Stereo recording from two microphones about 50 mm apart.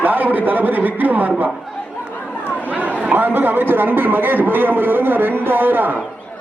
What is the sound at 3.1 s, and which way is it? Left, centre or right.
A man's voice, right.